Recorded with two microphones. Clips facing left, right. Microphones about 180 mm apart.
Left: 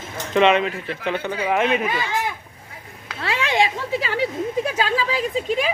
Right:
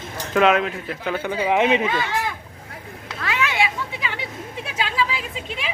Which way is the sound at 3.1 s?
30° left (ahead or behind).